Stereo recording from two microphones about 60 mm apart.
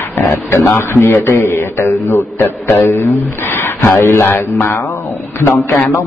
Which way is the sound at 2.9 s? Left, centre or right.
Left.